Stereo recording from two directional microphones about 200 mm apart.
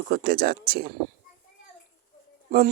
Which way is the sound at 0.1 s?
50° right (ahead or behind).